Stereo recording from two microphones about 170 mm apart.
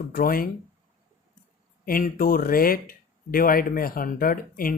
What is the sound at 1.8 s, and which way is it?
Speech, 55° left (ahead or behind).